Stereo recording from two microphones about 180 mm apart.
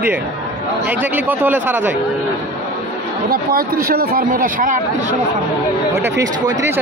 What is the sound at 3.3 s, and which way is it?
Speech, 55° right (ahead or behind).